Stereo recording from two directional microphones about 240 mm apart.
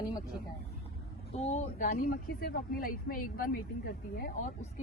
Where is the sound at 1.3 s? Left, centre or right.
Left.